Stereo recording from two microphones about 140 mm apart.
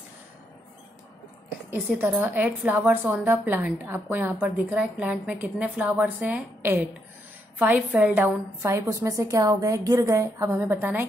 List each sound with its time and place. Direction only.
1.7 s a woman's voice: 15° right (ahead or behind)
8.6 s a woman's voice: 25° right (ahead or behind)